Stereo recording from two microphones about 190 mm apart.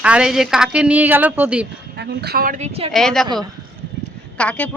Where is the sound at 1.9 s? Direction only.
60° right (ahead or behind); by 2.9 s 35° right (ahead or behind).